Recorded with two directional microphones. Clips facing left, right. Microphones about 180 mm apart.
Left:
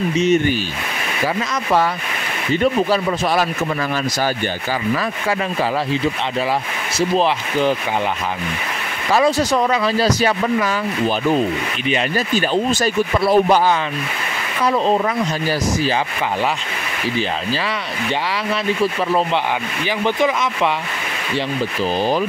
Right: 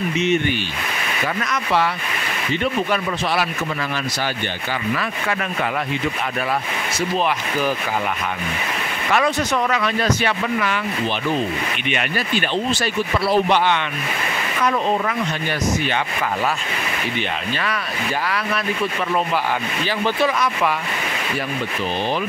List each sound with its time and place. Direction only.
0.2 s speech: 40° left (ahead or behind)
2.6 s speech: 40° left (ahead or behind)
7.2 s speech: 30° left (ahead or behind)
9.1 s speech: 35° left (ahead or behind)
12.3 s speech: 40° left (ahead or behind)
14.6 s speech: 30° left (ahead or behind)